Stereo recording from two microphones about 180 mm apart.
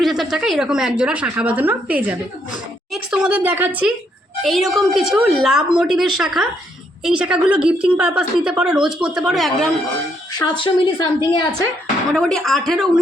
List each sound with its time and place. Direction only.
0.0 s a woman's voice: centre (ahead or behind)
10.3 s speech: 25° left (ahead or behind)
12.1 s a woman's voice: 5° left (ahead or behind)